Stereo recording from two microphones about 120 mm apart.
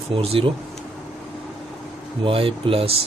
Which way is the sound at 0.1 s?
50° right (ahead or behind).